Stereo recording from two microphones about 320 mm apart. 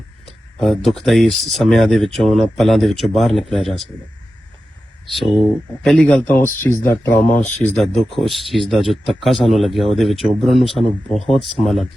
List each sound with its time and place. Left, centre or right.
0.6 s speech: centre
5.1 s speech: centre
7.3 s speech: left
7.6 s speech: centre